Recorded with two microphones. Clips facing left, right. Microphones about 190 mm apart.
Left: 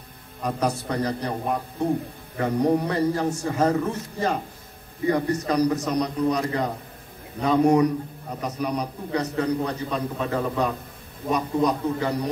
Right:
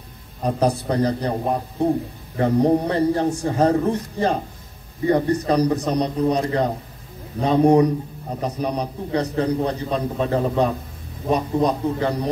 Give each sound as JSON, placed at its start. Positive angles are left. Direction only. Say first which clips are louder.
{"t": 0.4, "sound": "a man's voice", "louder": "right 5 dB", "side_deg": -30}
{"t": 5.0, "sound": "a man's voice", "louder": "right 4 dB", "side_deg": -30}